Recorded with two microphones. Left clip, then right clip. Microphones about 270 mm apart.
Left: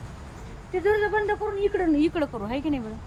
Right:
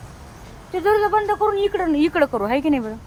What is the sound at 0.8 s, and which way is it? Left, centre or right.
Speech, right.